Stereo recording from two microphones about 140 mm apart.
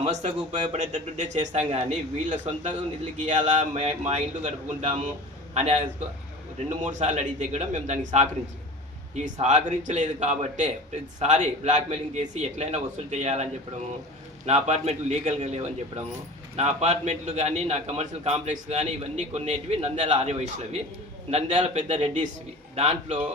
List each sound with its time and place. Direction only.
0.0 s speech: 55° right (ahead or behind)
5.5 s a man's voice: 50° right (ahead or behind)